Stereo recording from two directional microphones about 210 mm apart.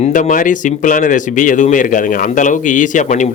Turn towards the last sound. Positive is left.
turn(degrees=35)  # may be behind; listen again after turning